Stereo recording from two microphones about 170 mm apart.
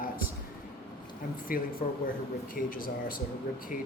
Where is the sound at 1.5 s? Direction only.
55° left (ahead or behind).